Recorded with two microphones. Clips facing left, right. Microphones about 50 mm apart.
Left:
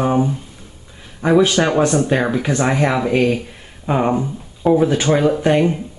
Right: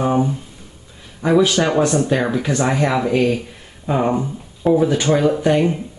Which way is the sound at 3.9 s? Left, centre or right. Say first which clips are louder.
Left 1 dB; left.